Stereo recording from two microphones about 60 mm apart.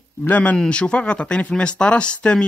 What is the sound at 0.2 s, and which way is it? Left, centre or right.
Speech, left.